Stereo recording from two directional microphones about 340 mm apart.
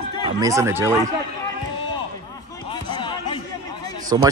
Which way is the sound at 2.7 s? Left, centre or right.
Centre.